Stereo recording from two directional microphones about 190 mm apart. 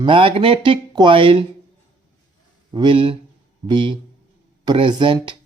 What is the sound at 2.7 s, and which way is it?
Speech, 25° right (ahead or behind).